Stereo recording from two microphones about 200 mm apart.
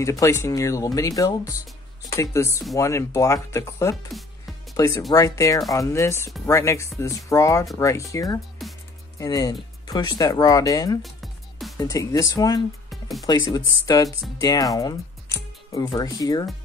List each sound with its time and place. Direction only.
0.0 s speech: 15° left (ahead or behind)
8.6 s music: centre (ahead or behind)
9.2 s speech: 15° left (ahead or behind)